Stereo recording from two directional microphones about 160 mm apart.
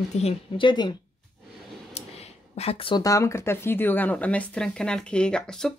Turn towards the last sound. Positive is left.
turn(degrees=5)  # may be behind; listen again after turning